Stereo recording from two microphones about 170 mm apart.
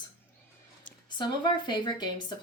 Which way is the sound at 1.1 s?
25° left (ahead or behind).